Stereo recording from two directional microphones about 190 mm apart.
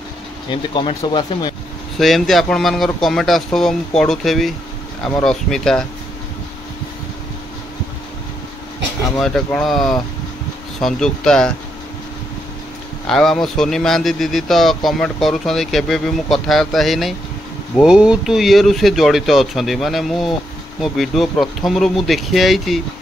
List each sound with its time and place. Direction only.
0.5 s speech: 25° left (ahead or behind)
2.0 s speech: centre (ahead or behind)
9.2 s speech: 5° left (ahead or behind)
13.0 s speech: centre (ahead or behind)